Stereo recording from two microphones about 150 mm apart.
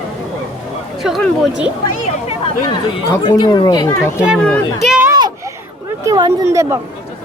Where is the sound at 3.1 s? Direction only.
25° left (ahead or behind).